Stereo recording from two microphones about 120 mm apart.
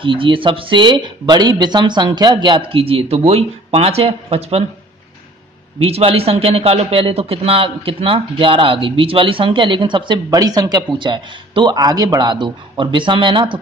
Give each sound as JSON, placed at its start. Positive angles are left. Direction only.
{"t": 0.0, "sound": "speech", "side_deg": -45}
{"t": 2.7, "sound": "speech", "side_deg": -55}
{"t": 5.9, "sound": "a man's voice", "side_deg": -55}